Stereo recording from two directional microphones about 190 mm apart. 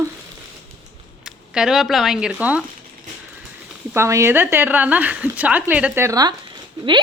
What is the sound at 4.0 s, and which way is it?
Speech, 15° right (ahead or behind).